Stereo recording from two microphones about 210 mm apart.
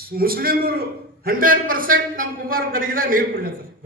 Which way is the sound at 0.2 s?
45° right (ahead or behind).